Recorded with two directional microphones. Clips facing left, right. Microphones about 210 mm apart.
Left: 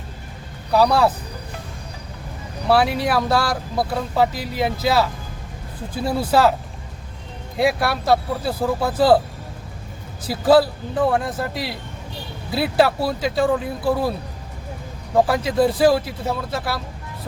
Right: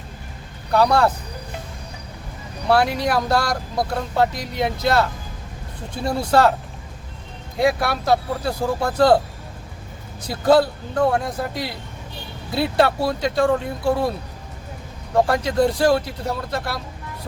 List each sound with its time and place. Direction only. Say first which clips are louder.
0.7 s speech: left 1 dB; centre (ahead or behind)
2.6 s speech: left 1 dB; centre (ahead or behind)
7.6 s speech: even; centre (ahead or behind)
10.2 s speech: left 1 dB; 5° left (ahead or behind)